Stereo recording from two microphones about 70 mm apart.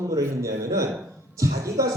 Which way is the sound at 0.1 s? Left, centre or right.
Right.